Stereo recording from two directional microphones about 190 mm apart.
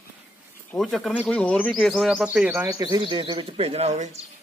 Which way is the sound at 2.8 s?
25° right (ahead or behind).